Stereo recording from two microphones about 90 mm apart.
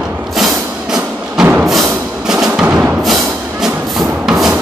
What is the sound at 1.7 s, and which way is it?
Music, 5° right (ahead or behind).